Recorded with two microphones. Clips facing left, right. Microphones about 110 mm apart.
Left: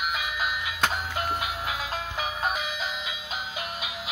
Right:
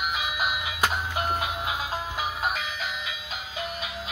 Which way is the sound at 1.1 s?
20° right (ahead or behind).